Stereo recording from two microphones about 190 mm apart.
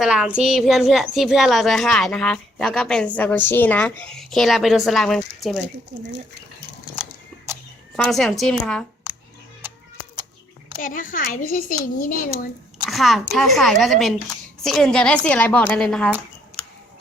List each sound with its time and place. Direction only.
0.0 s a woman's voice: 5° right (ahead or behind)
7.9 s a woman's voice: centre (ahead or behind)
9.1 s a sound: 5° right (ahead or behind)
10.8 s speech: 45° left (ahead or behind)
12.8 s a child's voice: centre (ahead or behind)